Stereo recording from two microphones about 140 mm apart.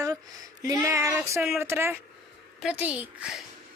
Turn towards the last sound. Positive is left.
turn(degrees=-5)  # may be behind; listen again after turning